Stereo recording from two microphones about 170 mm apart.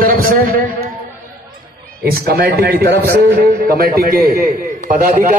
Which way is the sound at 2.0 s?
65° right (ahead or behind).